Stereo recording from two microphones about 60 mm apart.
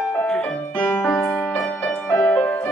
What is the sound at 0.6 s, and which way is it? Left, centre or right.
Music, left.